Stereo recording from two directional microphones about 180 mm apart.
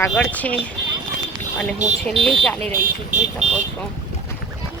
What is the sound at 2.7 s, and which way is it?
Speech, 45° right (ahead or behind).